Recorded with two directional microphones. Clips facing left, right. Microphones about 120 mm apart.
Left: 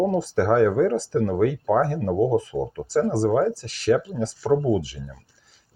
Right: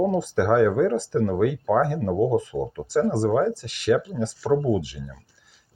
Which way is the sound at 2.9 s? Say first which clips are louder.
Even; 35° left (ahead or behind).